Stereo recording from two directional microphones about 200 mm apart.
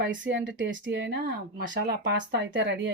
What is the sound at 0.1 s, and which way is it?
Speech, 65° right (ahead or behind).